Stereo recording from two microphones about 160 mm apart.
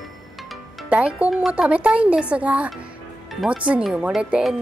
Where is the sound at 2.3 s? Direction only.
10° right (ahead or behind).